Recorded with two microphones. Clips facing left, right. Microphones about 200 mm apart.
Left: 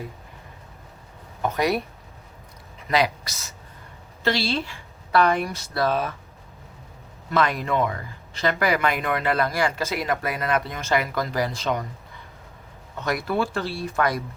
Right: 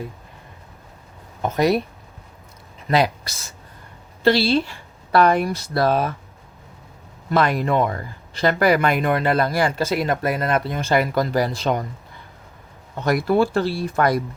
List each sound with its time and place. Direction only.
3.2 s speech: 30° right (ahead or behind)
7.3 s speech: 35° right (ahead or behind)
13.0 s speech: 35° right (ahead or behind)